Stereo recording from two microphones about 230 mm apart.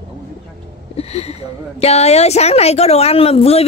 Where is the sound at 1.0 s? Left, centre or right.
Left.